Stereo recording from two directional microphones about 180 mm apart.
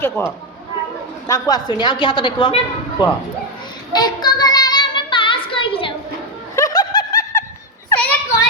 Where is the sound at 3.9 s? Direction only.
25° left (ahead or behind).